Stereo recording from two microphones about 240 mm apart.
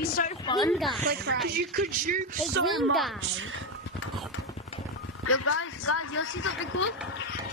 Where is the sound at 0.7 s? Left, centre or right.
Centre.